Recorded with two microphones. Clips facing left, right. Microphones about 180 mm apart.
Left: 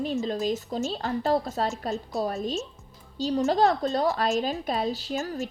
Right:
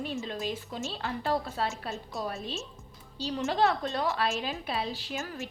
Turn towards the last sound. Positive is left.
turn(degrees=40)  # may be behind; listen again after turning